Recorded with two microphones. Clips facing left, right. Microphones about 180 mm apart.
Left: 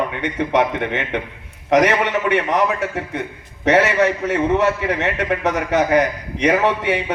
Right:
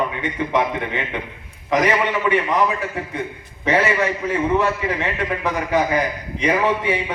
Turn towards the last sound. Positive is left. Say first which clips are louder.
# left 2 dB
turn(degrees=70)  # may be behind; listen again after turning